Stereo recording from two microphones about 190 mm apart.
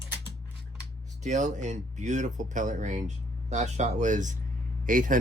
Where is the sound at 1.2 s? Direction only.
40° right (ahead or behind).